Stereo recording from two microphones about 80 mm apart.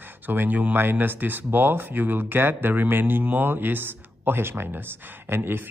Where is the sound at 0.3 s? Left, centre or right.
Right.